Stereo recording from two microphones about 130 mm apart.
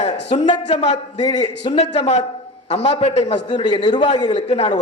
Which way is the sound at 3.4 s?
35° left (ahead or behind).